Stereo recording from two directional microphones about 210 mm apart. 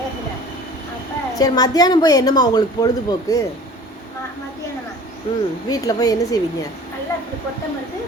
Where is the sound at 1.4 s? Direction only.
20° left (ahead or behind).